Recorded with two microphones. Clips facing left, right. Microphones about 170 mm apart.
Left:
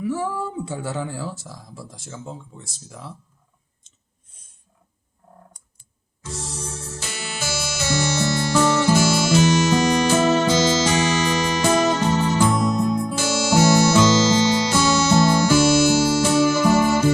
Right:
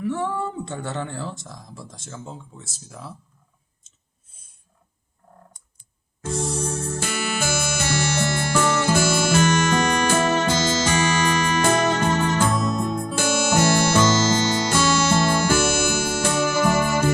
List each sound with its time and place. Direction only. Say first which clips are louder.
0.0 s speech: even; 5° left (ahead or behind)
6.2 s music: right 8 dB; 55° right (ahead or behind)
12.7 s music: left 4 dB; 15° left (ahead or behind)
13.0 s music: even; 55° right (ahead or behind)